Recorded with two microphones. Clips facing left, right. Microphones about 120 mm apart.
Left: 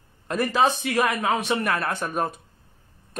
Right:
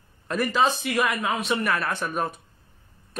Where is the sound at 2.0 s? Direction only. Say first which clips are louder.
Left 1 dB; 40° left (ahead or behind).